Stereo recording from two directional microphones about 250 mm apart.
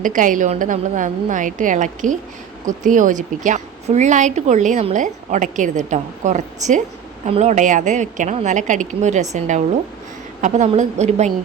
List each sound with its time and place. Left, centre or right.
0.0 s a woman's voice: right
10.4 s a woman's voice: right